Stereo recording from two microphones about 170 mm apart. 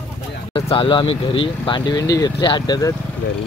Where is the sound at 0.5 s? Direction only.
30° left (ahead or behind).